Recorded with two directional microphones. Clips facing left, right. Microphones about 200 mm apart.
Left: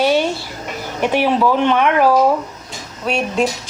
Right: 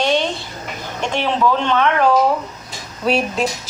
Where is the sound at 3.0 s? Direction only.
5° right (ahead or behind).